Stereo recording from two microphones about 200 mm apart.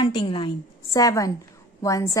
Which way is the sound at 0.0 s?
25° left (ahead or behind).